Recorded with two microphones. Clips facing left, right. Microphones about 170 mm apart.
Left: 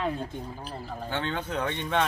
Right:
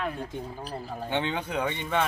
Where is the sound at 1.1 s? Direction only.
15° right (ahead or behind).